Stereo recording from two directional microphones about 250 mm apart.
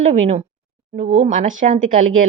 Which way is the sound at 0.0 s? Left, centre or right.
Right.